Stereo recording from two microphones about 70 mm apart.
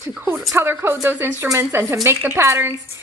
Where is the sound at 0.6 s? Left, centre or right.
Right.